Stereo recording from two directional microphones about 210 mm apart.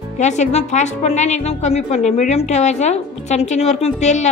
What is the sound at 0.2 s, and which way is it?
A woman's voice, 35° left (ahead or behind).